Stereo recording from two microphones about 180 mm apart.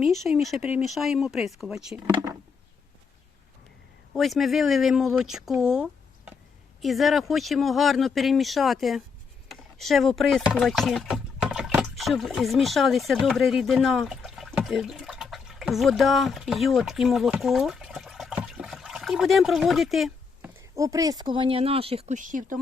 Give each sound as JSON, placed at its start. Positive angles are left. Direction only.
{"t": 0.0, "sound": "speech", "side_deg": 0}
{"t": 4.1, "sound": "speech", "side_deg": 0}
{"t": 20.7, "sound": "speech", "side_deg": -20}